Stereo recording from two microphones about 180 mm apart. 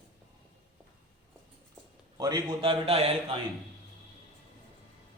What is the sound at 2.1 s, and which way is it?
A man's voice, 20° right (ahead or behind).